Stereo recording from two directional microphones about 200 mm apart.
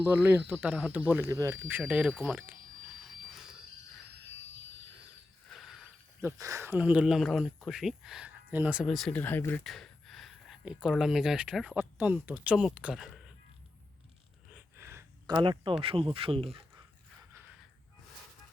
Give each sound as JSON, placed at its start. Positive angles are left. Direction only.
{"t": 0.0, "sound": "speech", "side_deg": -10}
{"t": 3.0, "sound": "a sound", "side_deg": 0}
{"t": 5.5, "sound": "a sound", "side_deg": 0}
{"t": 6.4, "sound": "speech", "side_deg": -15}
{"t": 14.5, "sound": "gasp", "side_deg": -15}
{"t": 15.8, "sound": "speech", "side_deg": -25}